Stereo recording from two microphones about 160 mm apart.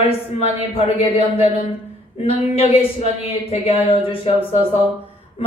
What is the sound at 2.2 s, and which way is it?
Speech, 40° left (ahead or behind).